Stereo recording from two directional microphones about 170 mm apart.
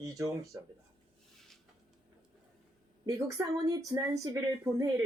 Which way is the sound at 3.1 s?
20° right (ahead or behind).